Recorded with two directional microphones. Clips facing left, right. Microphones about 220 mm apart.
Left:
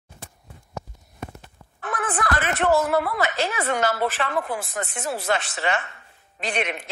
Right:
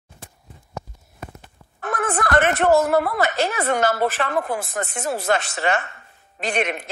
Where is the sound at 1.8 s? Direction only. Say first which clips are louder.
Right 3 dB; 45° right (ahead or behind).